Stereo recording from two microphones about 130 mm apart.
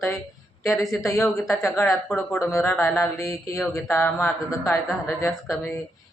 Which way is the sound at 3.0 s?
25° left (ahead or behind).